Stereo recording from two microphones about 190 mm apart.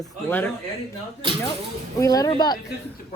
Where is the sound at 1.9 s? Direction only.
20° left (ahead or behind).